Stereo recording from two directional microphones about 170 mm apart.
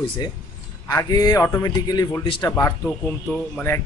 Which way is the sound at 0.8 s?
20° left (ahead or behind).